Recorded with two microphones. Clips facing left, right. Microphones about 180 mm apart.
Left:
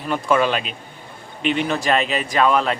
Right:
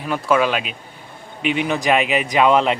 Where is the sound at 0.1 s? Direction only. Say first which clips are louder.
Right 1 dB; 5° right (ahead or behind).